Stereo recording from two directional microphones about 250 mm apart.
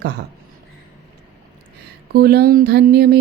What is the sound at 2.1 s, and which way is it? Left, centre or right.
Speech, right.